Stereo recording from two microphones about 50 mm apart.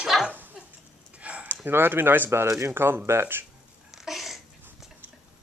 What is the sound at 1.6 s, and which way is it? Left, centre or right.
Speech, right.